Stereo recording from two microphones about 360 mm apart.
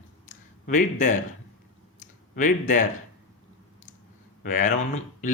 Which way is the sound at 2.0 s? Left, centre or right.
Left.